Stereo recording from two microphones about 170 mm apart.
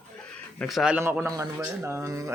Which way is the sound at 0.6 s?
Centre (ahead or behind).